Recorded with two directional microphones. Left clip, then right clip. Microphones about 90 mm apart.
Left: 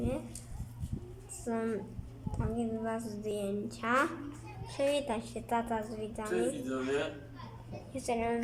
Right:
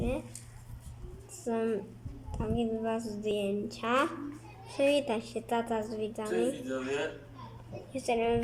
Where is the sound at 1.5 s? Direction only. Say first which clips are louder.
Right 4 dB; 10° right (ahead or behind).